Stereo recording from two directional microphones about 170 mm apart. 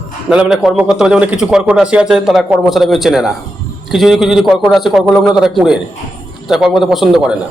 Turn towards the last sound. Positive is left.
turn(degrees=-5)  # may be behind; listen again after turning